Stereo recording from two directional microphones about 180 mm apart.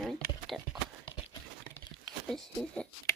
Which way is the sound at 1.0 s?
25° left (ahead or behind).